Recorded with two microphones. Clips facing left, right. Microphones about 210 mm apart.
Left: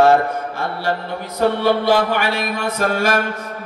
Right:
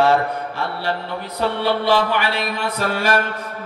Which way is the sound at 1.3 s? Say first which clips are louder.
Left 4 dB; 45° left (ahead or behind).